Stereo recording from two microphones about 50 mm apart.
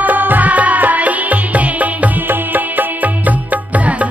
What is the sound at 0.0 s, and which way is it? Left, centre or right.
Music, right.